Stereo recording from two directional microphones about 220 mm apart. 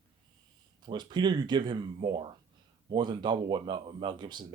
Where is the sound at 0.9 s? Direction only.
20° right (ahead or behind).